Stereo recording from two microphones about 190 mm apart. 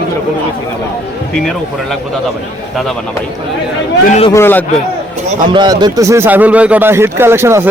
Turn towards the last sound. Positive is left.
turn(degrees=-15)  # may be behind; listen again after turning